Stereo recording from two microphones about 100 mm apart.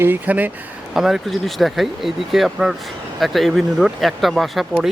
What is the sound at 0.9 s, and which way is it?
Speech, 5° right (ahead or behind).